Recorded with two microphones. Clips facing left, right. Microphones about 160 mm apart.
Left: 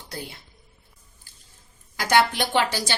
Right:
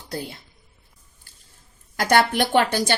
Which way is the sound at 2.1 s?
55° right (ahead or behind).